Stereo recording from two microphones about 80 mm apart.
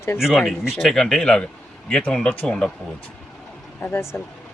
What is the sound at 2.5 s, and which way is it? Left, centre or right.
Speech, centre.